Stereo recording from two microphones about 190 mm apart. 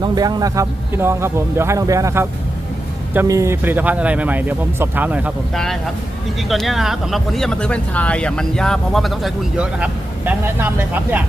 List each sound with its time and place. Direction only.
0.0 s a man's voice: 20° right (ahead or behind)
5.5 s speech: centre (ahead or behind)